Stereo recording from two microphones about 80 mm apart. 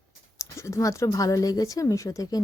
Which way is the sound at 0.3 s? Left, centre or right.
Left.